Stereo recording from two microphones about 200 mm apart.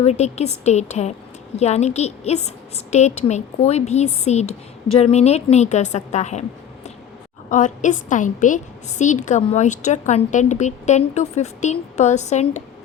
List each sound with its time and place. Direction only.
0.0 s a woman's voice: 35° left (ahead or behind)
7.5 s a woman's voice: 40° left (ahead or behind)